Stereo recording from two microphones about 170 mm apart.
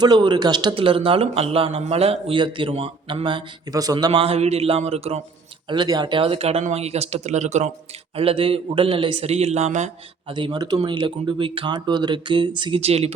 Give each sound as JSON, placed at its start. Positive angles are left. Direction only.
{"t": 0.0, "sound": "a man's voice", "side_deg": -25}
{"t": 5.6, "sound": "a man's voice", "side_deg": -25}
{"t": 10.3, "sound": "speech", "side_deg": -25}